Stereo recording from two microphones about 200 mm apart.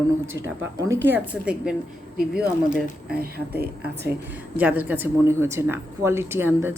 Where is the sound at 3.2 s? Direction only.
50° right (ahead or behind).